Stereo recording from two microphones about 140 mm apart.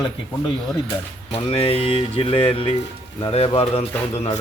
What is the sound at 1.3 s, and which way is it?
A man's voice, 45° left (ahead or behind).